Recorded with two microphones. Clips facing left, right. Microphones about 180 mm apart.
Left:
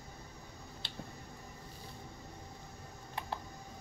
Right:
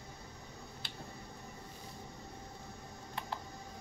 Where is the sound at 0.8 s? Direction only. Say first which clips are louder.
Even; 25° left (ahead or behind).